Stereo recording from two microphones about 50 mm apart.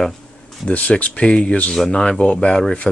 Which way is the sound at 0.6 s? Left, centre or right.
Left.